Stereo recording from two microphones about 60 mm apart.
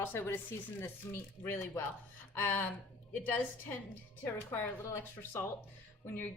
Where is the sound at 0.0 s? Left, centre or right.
Left.